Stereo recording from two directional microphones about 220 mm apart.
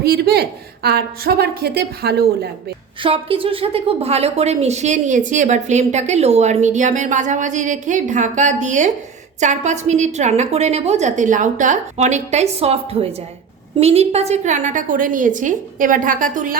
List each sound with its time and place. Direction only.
0.0 s a woman's voice: 45° right (ahead or behind)
3.0 s a woman's voice: 25° right (ahead or behind)